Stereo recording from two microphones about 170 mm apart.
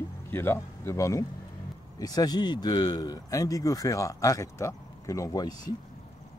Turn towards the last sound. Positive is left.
turn(degrees=25)  # may be behind; listen again after turning